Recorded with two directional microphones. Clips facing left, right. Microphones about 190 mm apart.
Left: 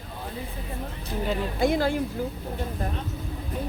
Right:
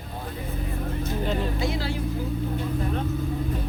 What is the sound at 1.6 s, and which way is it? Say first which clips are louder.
Speech: left 5 dB; 50° left (ahead or behind).